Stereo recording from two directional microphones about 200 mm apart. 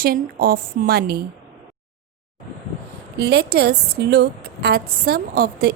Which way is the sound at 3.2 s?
55° right (ahead or behind).